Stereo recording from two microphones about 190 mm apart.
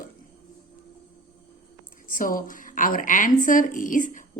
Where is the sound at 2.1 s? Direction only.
45° left (ahead or behind).